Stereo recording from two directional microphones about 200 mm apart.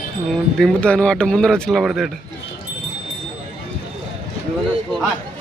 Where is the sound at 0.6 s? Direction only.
5° left (ahead or behind).